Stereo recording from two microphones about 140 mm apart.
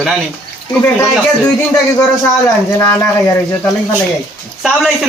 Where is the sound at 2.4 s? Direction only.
20° left (ahead or behind).